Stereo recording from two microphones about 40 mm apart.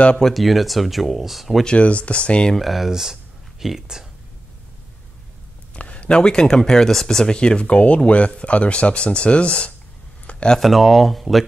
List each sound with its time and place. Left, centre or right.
0.2 s speech: centre
1.8 s speech: left
2.5 s speech: centre
5.8 s speech: left; by 7.3 s centre
7.3 s speech: left
10.3 s a sound: left
10.6 s speech: centre